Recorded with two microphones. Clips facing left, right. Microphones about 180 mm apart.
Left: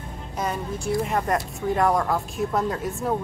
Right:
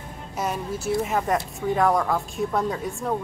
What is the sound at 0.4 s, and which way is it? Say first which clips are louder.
Speech: even; 5° right (ahead or behind).